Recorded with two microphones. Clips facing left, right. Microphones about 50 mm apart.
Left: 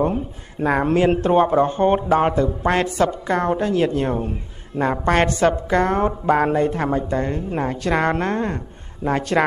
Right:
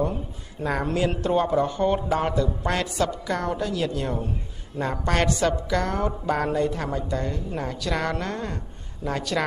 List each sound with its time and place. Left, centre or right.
0.0 s a woman's voice: left